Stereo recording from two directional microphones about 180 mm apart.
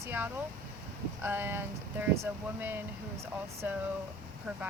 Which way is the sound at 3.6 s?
10° right (ahead or behind).